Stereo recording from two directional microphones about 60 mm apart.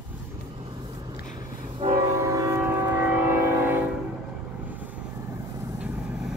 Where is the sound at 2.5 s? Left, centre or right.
Right.